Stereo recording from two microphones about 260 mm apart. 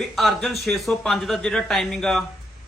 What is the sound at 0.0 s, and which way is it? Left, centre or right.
Speech, centre.